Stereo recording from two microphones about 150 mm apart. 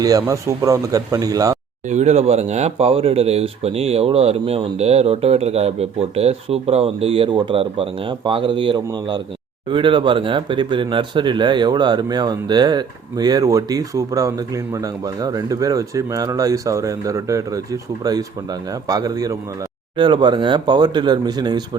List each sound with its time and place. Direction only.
0.0 s speech: 25° right (ahead or behind)
1.9 s speech: 50° right (ahead or behind); by 21.6 s 30° right (ahead or behind)